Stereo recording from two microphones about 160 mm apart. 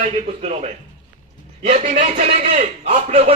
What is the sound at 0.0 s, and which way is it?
A man's voice, 40° right (ahead or behind).